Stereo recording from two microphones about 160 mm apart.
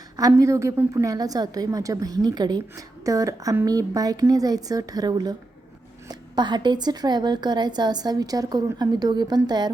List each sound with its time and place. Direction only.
0.2 s a woman's voice: 20° right (ahead or behind)